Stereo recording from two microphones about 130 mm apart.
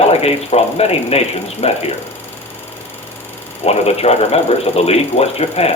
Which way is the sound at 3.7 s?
55° left (ahead or behind).